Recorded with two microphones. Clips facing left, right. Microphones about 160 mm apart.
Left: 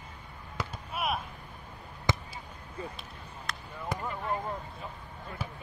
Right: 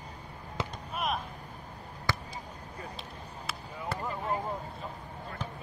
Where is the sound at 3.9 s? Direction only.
15° left (ahead or behind).